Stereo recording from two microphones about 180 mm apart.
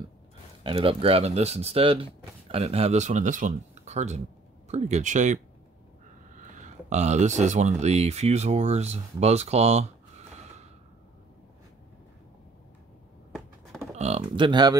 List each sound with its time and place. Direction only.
0.7 s speech: 30° right (ahead or behind)
13.9 s speech: 35° right (ahead or behind)